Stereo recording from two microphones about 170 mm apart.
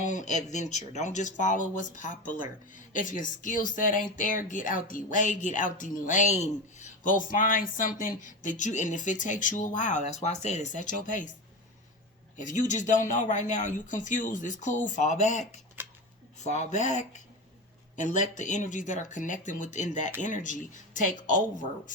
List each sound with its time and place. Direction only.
0.0 s speech: 45° left (ahead or behind)
12.4 s speech: 45° left (ahead or behind)